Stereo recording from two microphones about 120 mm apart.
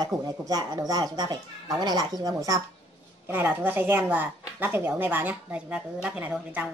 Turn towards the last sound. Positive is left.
turn(degrees=-15)  # may be behind; listen again after turning